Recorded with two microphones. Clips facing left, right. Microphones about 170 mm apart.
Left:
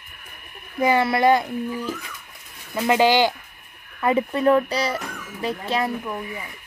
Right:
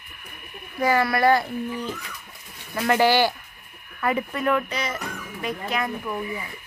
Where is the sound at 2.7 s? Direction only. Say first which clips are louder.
Left 2 dB; 15° left (ahead or behind).